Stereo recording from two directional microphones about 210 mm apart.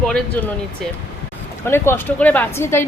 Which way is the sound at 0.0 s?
5° left (ahead or behind).